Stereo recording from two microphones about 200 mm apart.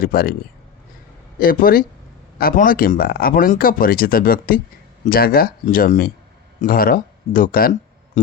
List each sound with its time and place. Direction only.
0.0 s speech: 45° left (ahead or behind)
1.4 s speech: 45° left (ahead or behind)